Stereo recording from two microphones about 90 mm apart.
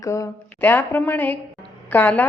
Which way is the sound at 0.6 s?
25° left (ahead or behind).